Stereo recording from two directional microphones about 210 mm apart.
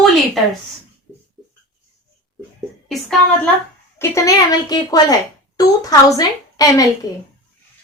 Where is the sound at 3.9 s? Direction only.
15° left (ahead or behind).